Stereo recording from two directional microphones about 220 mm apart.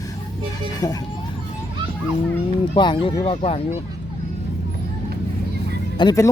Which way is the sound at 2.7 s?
20° left (ahead or behind).